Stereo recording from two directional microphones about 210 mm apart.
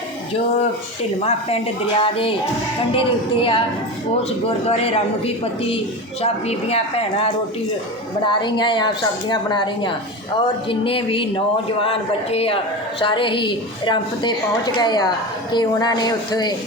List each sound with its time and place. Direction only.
1.2 s a woman's voice: 30° left (ahead or behind)
4.7 s a woman's voice: 30° left (ahead or behind)